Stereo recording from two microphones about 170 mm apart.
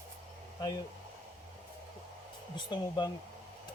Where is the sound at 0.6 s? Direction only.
25° left (ahead or behind).